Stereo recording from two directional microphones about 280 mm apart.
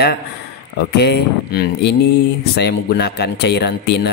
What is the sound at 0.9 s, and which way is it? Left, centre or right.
Speech, left.